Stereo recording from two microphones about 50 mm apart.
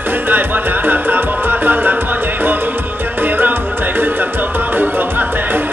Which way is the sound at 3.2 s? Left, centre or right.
Right.